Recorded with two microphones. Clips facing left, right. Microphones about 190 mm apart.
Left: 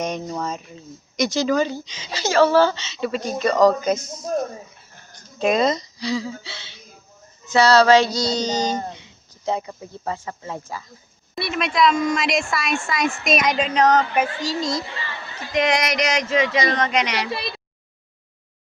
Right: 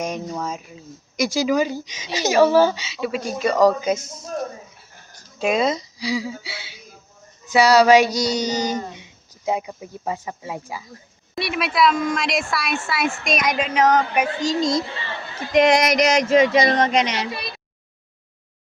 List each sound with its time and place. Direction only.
0.0 s speech: 5° right (ahead or behind)
5.4 s a woman's voice: 5° right (ahead or behind)
15.5 s speech: 45° right (ahead or behind); by 17.2 s 25° right (ahead or behind)